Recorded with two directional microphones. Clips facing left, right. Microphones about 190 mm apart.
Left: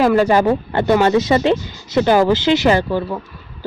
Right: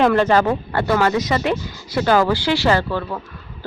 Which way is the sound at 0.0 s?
10° left (ahead or behind).